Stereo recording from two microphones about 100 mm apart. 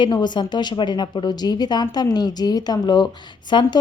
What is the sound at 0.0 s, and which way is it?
A woman's voice, 50° left (ahead or behind).